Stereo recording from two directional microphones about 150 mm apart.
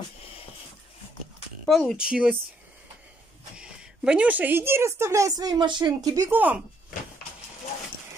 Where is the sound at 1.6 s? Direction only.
Centre (ahead or behind).